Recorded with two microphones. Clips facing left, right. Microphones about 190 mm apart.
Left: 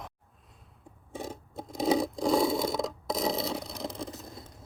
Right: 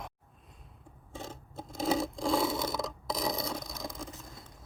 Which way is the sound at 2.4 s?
20° left (ahead or behind).